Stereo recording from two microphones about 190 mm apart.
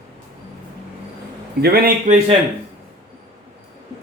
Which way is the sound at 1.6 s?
50° right (ahead or behind).